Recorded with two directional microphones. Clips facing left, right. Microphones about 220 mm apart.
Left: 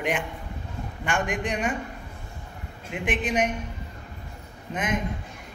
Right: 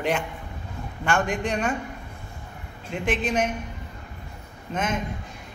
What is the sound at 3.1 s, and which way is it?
Speech, 15° left (ahead or behind).